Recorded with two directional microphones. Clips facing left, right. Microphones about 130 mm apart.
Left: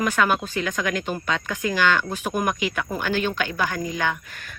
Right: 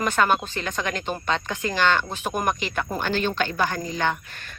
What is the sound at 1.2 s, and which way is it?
Speech, 25° right (ahead or behind).